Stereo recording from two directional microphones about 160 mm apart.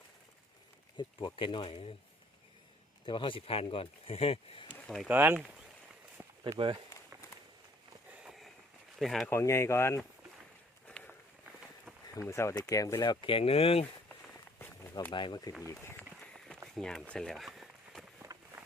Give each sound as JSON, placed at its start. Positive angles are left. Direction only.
{"t": 0.9, "sound": "speech", "side_deg": 30}
{"t": 3.1, "sound": "speech", "side_deg": 30}
{"t": 5.0, "sound": "speech", "side_deg": -10}
{"t": 6.5, "sound": "speech", "side_deg": -30}
{"t": 8.1, "sound": "a sound", "side_deg": -5}
{"t": 9.0, "sound": "speech", "side_deg": 0}
{"t": 9.3, "sound": "speech", "side_deg": 15}
{"t": 10.8, "sound": "run", "side_deg": 5}
{"t": 12.3, "sound": "speech", "side_deg": 15}
{"t": 15.1, "sound": "speech", "side_deg": 30}
{"t": 15.6, "sound": "a sound", "side_deg": 15}
{"t": 16.7, "sound": "a sound", "side_deg": 5}
{"t": 18.2, "sound": "run", "side_deg": -15}